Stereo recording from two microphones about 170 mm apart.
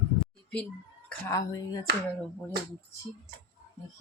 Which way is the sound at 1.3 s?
20° left (ahead or behind).